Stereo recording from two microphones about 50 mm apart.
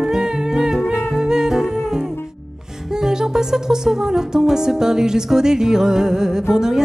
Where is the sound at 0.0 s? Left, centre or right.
Centre.